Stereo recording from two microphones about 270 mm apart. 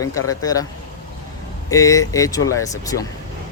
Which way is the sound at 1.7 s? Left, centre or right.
Centre.